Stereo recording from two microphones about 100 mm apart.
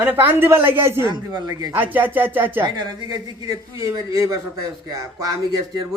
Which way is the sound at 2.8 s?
40° right (ahead or behind).